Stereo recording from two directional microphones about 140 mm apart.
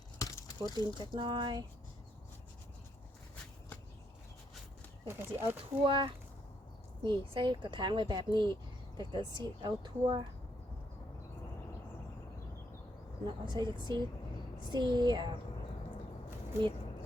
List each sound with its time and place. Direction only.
0.2 s a sound: 25° left (ahead or behind)
1.1 s speech: 30° right (ahead or behind)
5.0 s speech: 15° right (ahead or behind)
5.8 s speech: 40° right (ahead or behind)
13.2 s speech: 30° right (ahead or behind)